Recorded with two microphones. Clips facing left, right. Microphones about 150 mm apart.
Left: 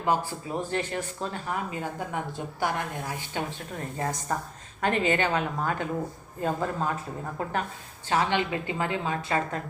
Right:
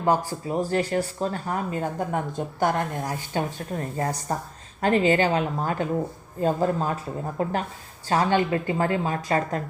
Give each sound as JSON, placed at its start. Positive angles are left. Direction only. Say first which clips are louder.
{"t": 0.0, "sound": "speech", "louder": "right 4 dB", "side_deg": -40}